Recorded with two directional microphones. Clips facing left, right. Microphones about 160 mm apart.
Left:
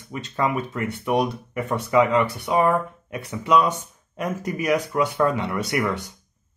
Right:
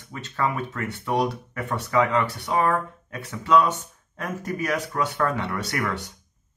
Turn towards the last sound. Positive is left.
turn(degrees=15)  # may be behind; listen again after turning